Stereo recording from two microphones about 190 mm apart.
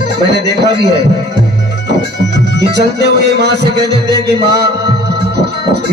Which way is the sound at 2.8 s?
60° right (ahead or behind).